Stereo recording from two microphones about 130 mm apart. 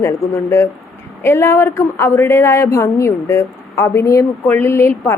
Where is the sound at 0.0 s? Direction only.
20° left (ahead or behind).